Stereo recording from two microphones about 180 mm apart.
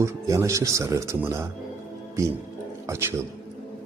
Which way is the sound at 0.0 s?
15° right (ahead or behind).